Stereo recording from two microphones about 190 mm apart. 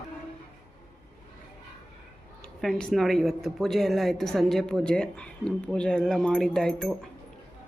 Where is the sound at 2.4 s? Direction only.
5° left (ahead or behind).